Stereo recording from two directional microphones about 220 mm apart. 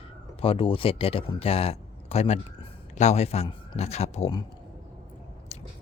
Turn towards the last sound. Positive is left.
turn(degrees=30)  # may be behind; listen again after turning